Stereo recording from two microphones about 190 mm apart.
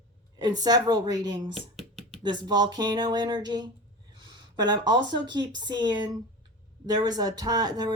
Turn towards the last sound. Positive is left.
turn(degrees=-20)  # may be behind; listen again after turning